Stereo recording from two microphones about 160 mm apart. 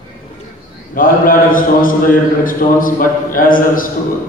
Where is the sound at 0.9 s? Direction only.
60° left (ahead or behind).